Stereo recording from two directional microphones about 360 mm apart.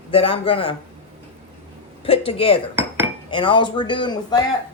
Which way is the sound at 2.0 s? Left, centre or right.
Centre.